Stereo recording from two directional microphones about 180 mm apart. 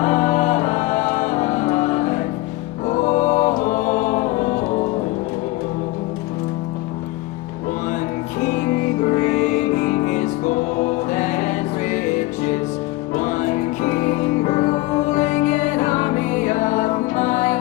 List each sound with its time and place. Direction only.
0.0 s music: 40° left (ahead or behind)
2.8 s music: 40° left (ahead or behind)
9.1 s music: 40° left (ahead or behind)
14.4 s music: 40° left (ahead or behind)